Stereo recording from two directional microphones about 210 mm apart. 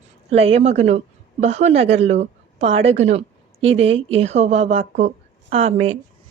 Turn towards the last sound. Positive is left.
turn(degrees=-30)  # may be behind; listen again after turning